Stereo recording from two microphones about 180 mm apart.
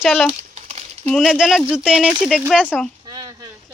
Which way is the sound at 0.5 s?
35° right (ahead or behind).